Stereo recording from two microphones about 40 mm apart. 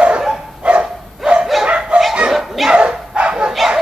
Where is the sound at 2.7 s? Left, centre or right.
Right.